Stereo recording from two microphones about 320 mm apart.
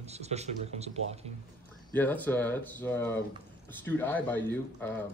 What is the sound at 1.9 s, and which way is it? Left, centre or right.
Speech, centre.